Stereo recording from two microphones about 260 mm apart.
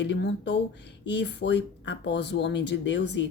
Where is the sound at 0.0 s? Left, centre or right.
Left.